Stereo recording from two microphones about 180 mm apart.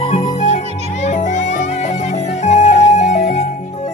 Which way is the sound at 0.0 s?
35° left (ahead or behind).